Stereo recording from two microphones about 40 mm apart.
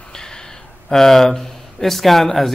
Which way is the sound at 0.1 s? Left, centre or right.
Centre.